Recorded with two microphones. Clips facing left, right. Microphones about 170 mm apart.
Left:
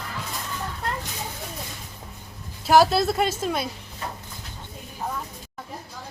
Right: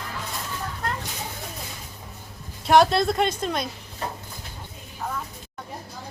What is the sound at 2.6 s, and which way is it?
A child's voice, 5° left (ahead or behind).